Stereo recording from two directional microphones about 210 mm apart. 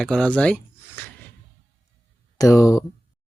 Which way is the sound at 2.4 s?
15° left (ahead or behind).